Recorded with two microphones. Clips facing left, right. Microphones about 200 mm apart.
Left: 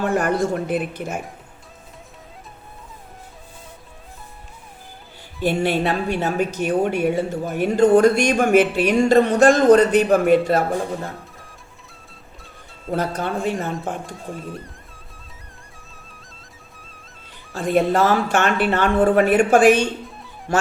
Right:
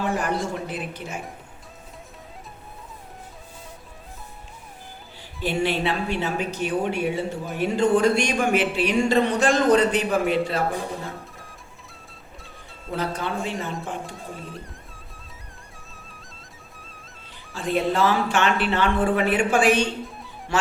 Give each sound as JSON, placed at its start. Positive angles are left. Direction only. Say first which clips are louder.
{"t": 0.0, "sound": "a woman's voice", "louder": "left 5 dB", "side_deg": 55}
{"t": 5.4, "sound": "a woman's voice", "louder": "left 4 dB", "side_deg": 50}
{"t": 12.9, "sound": "a woman's voice", "louder": "left 4 dB", "side_deg": 45}
{"t": 14.0, "sound": "speech", "louder": "left 4 dB", "side_deg": 0}
{"t": 15.3, "sound": "music", "louder": "even", "side_deg": 0}
{"t": 17.5, "sound": "a woman's voice", "louder": "left 5 dB", "side_deg": 45}
{"t": 19.8, "sound": "music", "louder": "left 2 dB", "side_deg": 0}
{"t": 20.5, "sound": "speech", "louder": "left 4 dB", "side_deg": 45}